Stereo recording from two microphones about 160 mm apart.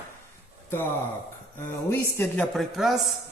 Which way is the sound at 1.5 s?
15° left (ahead or behind).